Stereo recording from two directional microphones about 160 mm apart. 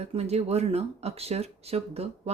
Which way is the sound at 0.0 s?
40° right (ahead or behind).